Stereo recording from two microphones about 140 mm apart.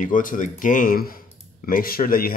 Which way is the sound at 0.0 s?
70° left (ahead or behind).